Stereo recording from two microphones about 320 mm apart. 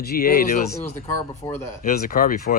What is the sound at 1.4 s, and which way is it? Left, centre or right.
Speech, centre.